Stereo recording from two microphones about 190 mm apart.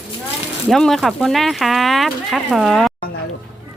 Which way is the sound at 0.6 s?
Centre (ahead or behind).